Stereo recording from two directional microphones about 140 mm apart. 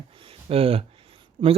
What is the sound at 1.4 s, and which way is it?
Speech, 30° right (ahead or behind).